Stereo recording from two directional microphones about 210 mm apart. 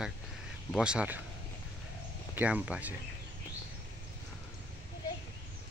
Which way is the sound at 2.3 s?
5° right (ahead or behind).